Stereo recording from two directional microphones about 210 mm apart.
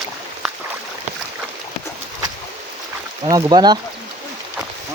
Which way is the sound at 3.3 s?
20° right (ahead or behind).